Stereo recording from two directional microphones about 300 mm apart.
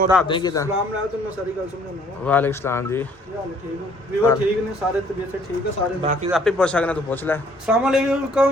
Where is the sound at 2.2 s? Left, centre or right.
Centre.